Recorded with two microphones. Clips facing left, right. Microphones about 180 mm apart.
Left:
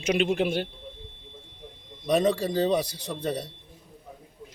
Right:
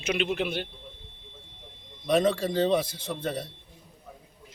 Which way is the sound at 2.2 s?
40° left (ahead or behind).